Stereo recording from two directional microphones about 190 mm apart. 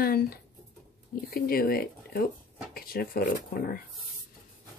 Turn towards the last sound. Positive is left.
turn(degrees=55)  # may be behind; listen again after turning